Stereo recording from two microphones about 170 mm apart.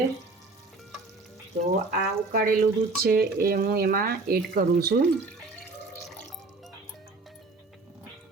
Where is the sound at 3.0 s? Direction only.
60° right (ahead or behind).